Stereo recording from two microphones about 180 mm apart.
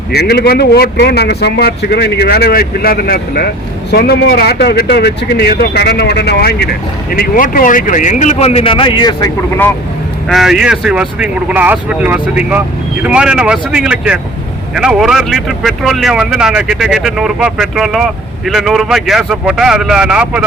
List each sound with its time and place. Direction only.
0.1 s speech: 60° left (ahead or behind); by 9.3 s 25° left (ahead or behind)
10.2 s speech: centre (ahead or behind)